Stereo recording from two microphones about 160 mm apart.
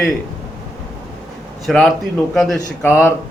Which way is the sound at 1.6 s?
Centre (ahead or behind).